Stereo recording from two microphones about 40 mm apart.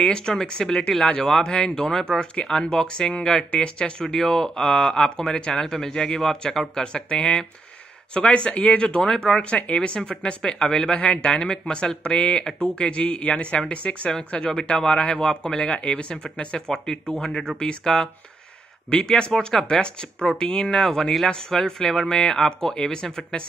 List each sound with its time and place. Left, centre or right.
0.0 s speech: centre
1.0 s speech: left
1.9 s speech: centre
5.6 s speech: centre
6.8 s speech: left
9.4 s speech: left
14.5 s speech: centre
19.3 s speech: centre